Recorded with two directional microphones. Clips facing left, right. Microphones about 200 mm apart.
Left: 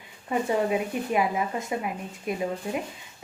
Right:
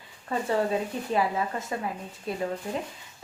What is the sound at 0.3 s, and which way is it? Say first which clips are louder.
A woman's voice: left 2 dB; 15° left (ahead or behind).